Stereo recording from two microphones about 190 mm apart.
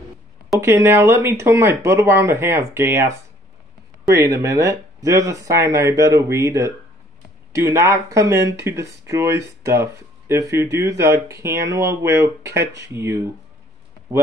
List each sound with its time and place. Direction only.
0.6 s speech: 15° right (ahead or behind)